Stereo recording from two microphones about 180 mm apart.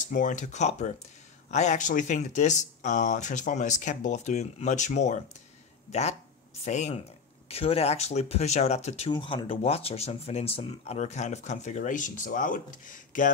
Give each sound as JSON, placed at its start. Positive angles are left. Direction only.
{"t": 0.1, "sound": "speech", "side_deg": 45}
{"t": 9.1, "sound": "speech", "side_deg": 25}